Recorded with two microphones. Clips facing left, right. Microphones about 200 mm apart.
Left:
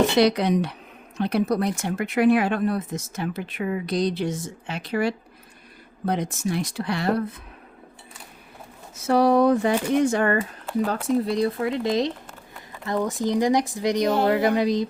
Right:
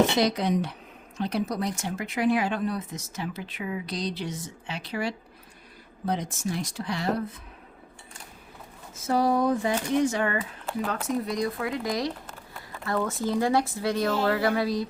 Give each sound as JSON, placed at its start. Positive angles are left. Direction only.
{"t": 0.2, "sound": "speech", "side_deg": 70}
{"t": 9.0, "sound": "speech", "side_deg": 70}
{"t": 10.8, "sound": "speech", "side_deg": 30}